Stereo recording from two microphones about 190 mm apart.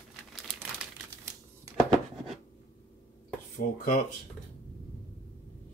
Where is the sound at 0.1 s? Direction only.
5° right (ahead or behind).